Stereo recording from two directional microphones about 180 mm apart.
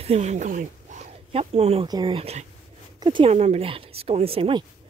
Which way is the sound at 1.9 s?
25° right (ahead or behind).